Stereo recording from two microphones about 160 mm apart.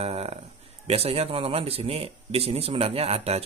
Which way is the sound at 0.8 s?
40° right (ahead or behind).